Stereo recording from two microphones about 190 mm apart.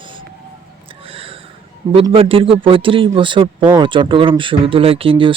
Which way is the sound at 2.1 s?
30° right (ahead or behind).